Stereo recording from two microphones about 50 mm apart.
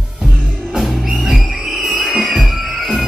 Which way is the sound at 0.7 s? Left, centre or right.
Centre.